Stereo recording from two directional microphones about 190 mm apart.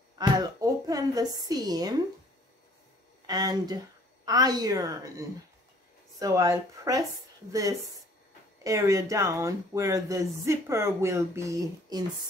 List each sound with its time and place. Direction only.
0.4 s speech: 20° right (ahead or behind)
3.3 s a woman's voice: 20° right (ahead or behind)
8.6 s speech: 15° right (ahead or behind)